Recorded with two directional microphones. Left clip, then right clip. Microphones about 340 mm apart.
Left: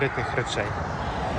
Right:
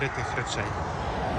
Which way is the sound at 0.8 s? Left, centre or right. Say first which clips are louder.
Left 1 dB; right.